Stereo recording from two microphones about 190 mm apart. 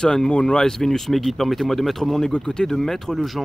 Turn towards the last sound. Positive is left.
turn(degrees=0)  # may be behind; listen again after turning